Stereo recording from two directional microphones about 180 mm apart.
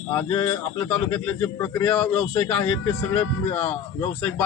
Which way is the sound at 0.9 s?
5° left (ahead or behind).